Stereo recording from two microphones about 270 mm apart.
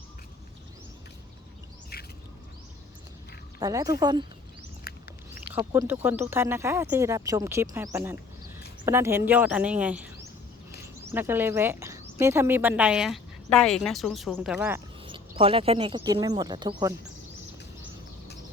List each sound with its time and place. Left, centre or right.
3.6 s speech: centre
5.5 s speech: centre
15.0 s speech: centre